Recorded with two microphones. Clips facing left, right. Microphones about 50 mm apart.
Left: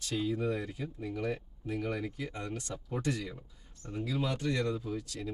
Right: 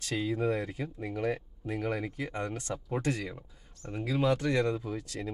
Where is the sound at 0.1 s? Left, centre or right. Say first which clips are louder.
Right 2 dB; right.